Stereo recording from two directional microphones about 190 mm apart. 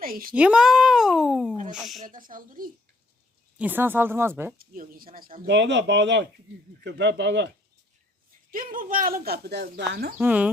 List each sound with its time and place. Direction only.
0.0 s speech: 50° right (ahead or behind)
0.3 s speech: 5° right (ahead or behind)
2.0 s speech: 45° right (ahead or behind)
3.6 s speech: 10° right (ahead or behind)
4.5 s speech: 50° right (ahead or behind); by 7.5 s 65° right (ahead or behind)
8.4 s speech: 45° right (ahead or behind)
10.2 s speech: 5° right (ahead or behind)